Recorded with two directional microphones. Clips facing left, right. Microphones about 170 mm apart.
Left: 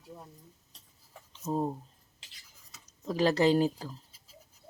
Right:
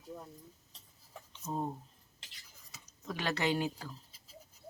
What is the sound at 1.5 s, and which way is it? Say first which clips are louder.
Speech: left 6 dB; 30° left (ahead or behind).